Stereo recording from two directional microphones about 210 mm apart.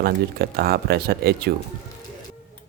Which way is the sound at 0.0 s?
50° right (ahead or behind).